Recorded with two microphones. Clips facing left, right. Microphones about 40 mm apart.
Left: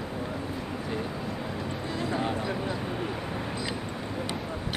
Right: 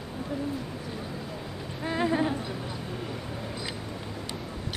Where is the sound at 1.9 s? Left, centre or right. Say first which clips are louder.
Right 6 dB; right.